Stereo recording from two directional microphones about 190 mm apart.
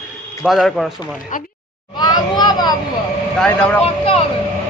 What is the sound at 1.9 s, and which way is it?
Children playing, 20° left (ahead or behind).